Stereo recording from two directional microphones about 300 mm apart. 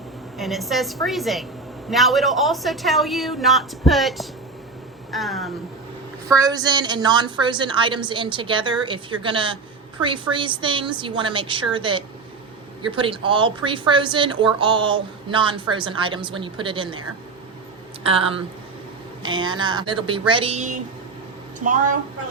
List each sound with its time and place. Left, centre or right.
0.3 s a woman's voice: centre
6.2 s speech: centre
18.0 s speech: centre